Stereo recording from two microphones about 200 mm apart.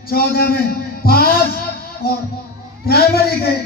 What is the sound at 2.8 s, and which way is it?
Speech, 50° left (ahead or behind).